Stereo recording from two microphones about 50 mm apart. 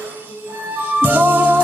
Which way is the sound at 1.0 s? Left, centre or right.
Right.